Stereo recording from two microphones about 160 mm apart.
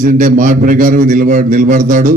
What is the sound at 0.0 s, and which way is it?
A man's voice, 55° right (ahead or behind).